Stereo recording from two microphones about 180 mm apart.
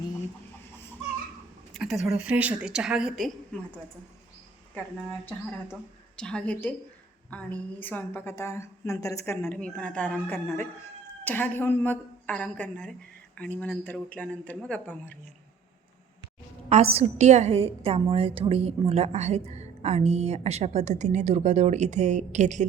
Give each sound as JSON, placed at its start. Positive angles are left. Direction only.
{"t": 1.7, "sound": "a woman's voice", "side_deg": 0}
{"t": 5.7, "sound": "a woman's voice", "side_deg": 5}
{"t": 16.6, "sound": "a woman's voice", "side_deg": -35}